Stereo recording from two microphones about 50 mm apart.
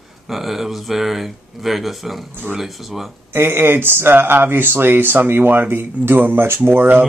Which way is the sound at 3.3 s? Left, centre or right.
Right.